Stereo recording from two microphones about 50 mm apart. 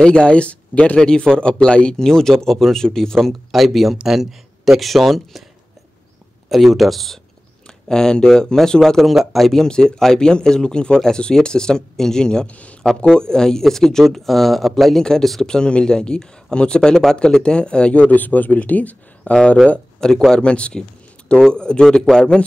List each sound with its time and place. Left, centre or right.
0.0 s speech: centre
1.2 s speech: centre
6.5 s speech: centre
7.9 s speech: centre
9.0 s speech: centre
9.7 s speech: centre
12.4 s speech: left
13.0 s speech: centre
18.1 s speech: left; by 22.4 s centre